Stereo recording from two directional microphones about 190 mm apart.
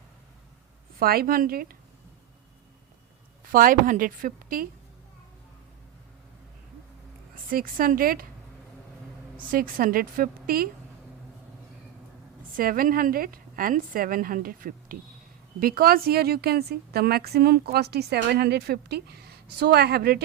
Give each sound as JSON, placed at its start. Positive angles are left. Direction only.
{"t": 0.9, "sound": "a woman's voice", "side_deg": -50}
{"t": 3.5, "sound": "a woman's voice", "side_deg": -45}
{"t": 7.5, "sound": "a woman's voice", "side_deg": -45}
{"t": 9.5, "sound": "a woman's voice", "side_deg": -50}
{"t": 12.5, "sound": "a woman's voice", "side_deg": -50}